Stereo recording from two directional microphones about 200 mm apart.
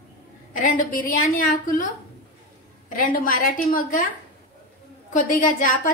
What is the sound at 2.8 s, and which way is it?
A woman's voice, 45° left (ahead or behind).